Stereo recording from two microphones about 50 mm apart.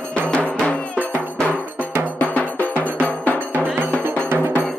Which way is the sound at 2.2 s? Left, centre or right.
Left.